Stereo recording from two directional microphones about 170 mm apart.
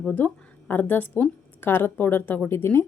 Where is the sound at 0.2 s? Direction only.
10° left (ahead or behind).